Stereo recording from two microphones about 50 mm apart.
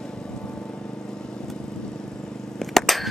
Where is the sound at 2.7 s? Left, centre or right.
Centre.